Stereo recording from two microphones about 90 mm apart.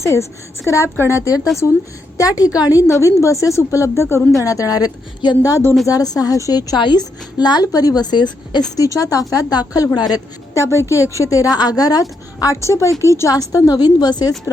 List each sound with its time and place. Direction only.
0.0 s a woman's voice: 35° left (ahead or behind)
2.1 s a woman's voice: 40° left (ahead or behind)
5.4 s a woman's voice: 40° left (ahead or behind)
8.7 s a woman's voice: 40° left (ahead or behind)
10.5 s a woman's voice: 35° left (ahead or behind)